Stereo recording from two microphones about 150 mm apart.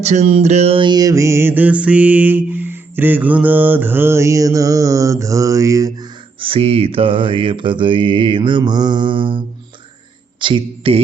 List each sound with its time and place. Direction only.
0.0 s music: 50° right (ahead or behind); by 6.1 s 20° right (ahead or behind)
6.4 s mantra: 40° right (ahead or behind)
10.4 s mantra: 35° right (ahead or behind)